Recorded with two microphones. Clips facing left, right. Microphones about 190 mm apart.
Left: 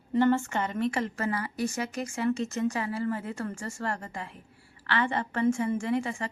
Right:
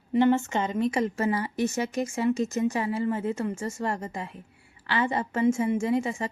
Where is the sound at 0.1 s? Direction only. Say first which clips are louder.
Right 2 dB; 15° right (ahead or behind).